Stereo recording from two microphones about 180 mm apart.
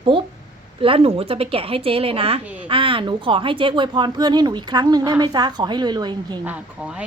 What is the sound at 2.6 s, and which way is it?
Speech, 30° right (ahead or behind).